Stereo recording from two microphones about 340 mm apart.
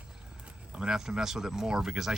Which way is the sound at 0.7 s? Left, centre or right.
Centre.